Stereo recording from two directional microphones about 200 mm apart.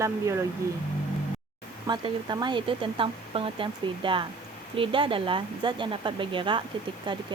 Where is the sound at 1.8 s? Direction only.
20° right (ahead or behind).